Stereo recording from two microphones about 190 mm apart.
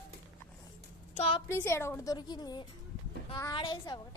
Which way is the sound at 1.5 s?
15° left (ahead or behind).